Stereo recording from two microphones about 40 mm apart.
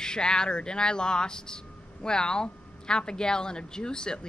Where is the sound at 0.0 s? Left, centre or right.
Centre.